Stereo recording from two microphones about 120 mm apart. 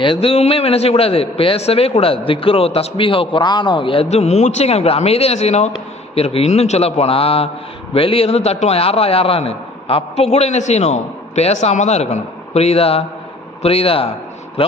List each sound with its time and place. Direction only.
0.0 s a man's voice: 50° left (ahead or behind)
4.1 s a man's voice: 65° left (ahead or behind)